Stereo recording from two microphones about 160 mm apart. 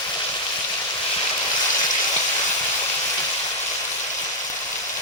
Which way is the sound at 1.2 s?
25° left (ahead or behind).